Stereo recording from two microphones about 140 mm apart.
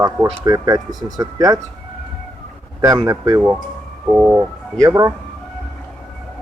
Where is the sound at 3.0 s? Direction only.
25° right (ahead or behind).